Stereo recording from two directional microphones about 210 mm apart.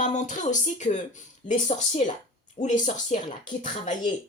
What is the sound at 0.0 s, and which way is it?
Speech, 35° left (ahead or behind).